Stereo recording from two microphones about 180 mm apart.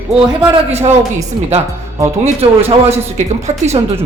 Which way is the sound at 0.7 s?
35° right (ahead or behind).